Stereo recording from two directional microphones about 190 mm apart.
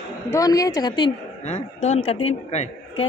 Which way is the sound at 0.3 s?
20° left (ahead or behind).